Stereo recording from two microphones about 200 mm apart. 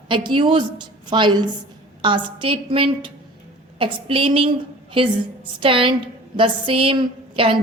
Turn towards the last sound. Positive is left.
turn(degrees=-25)  # may be behind; listen again after turning